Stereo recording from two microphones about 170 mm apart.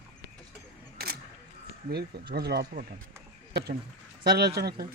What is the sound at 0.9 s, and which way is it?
Single-lens reflex camera, 65° right (ahead or behind).